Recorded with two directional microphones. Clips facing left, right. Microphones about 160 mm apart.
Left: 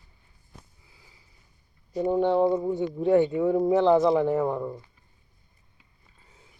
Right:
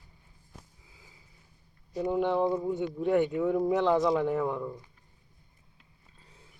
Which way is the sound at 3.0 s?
20° left (ahead or behind).